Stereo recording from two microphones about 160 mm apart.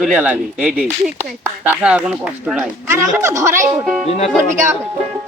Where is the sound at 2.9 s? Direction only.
15° right (ahead or behind).